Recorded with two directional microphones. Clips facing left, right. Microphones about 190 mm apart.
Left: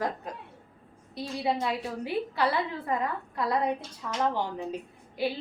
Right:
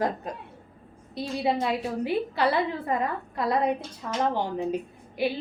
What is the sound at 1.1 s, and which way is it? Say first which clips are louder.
A woman's voice: right 3 dB; 20° right (ahead or behind).